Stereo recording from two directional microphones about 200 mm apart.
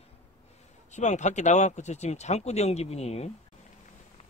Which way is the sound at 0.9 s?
35° left (ahead or behind).